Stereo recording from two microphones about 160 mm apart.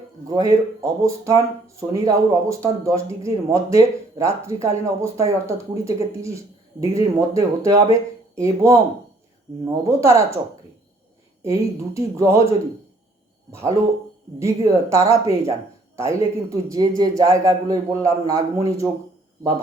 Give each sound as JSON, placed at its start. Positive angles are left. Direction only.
{"t": 0.3, "sound": "speech", "side_deg": -20}
{"t": 11.4, "sound": "speech", "side_deg": -20}